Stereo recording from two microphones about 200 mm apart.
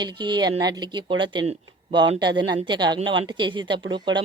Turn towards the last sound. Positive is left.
turn(degrees=-25)  # may be behind; listen again after turning